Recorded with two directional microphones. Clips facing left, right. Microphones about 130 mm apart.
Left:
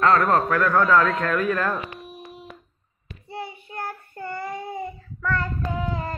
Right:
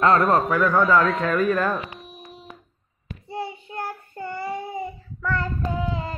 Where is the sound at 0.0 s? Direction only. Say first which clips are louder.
Right 1 dB; 20° right (ahead or behind).